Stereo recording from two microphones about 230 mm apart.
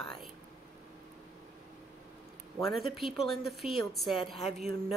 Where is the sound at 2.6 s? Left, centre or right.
Centre.